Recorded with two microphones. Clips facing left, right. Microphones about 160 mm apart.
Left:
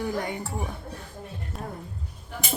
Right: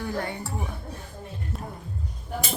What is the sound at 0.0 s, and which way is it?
Speech, 15° left (ahead or behind).